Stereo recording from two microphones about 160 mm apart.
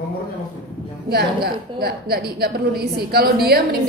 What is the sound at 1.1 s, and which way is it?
A woman's voice, 75° right (ahead or behind).